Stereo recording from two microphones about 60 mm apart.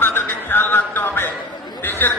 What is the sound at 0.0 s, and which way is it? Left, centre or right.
Music, left.